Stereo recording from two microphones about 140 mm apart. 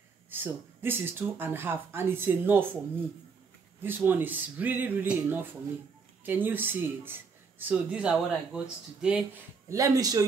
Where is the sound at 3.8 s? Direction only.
15° right (ahead or behind).